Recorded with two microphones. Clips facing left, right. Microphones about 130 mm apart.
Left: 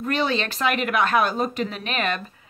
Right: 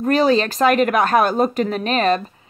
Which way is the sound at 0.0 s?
40° right (ahead or behind).